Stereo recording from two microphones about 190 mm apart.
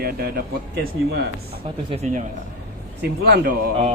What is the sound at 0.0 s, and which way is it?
Speech, 55° right (ahead or behind).